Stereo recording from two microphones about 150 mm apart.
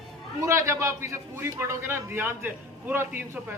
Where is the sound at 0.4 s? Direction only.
20° right (ahead or behind).